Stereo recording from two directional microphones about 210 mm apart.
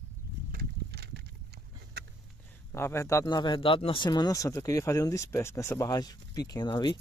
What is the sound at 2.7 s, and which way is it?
Speech, 10° left (ahead or behind).